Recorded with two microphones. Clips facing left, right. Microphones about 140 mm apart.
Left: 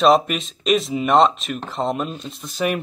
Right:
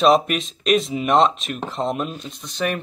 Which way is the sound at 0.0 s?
Centre (ahead or behind).